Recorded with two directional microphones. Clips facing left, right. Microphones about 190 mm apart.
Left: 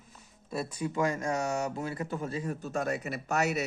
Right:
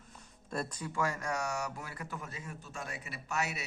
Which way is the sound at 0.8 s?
20° left (ahead or behind).